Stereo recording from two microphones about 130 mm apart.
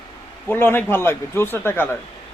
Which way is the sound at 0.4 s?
15° left (ahead or behind).